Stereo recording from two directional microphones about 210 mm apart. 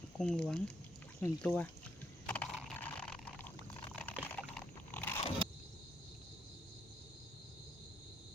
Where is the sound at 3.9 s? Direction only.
5° left (ahead or behind).